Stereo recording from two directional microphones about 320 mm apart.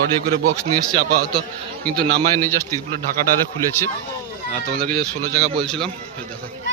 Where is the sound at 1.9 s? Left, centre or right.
Centre.